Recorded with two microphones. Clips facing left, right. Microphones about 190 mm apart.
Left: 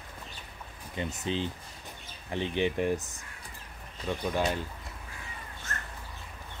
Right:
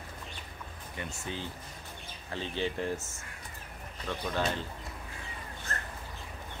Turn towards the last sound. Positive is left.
turn(degrees=-30)  # may be behind; listen again after turning